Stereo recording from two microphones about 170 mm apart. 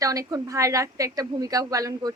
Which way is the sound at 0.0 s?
20° right (ahead or behind).